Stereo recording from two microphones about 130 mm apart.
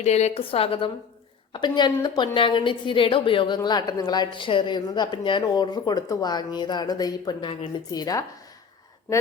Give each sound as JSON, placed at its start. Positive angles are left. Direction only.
{"t": 0.0, "sound": "a woman's voice", "side_deg": 60}
{"t": 1.5, "sound": "a woman's voice", "side_deg": 35}